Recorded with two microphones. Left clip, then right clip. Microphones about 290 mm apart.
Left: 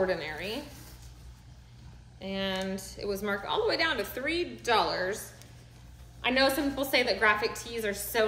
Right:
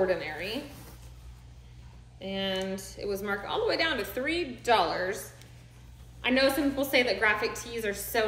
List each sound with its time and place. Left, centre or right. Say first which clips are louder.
0.0 s speech: right 2 dB; centre
2.1 s a woman's voice: right 1 dB; centre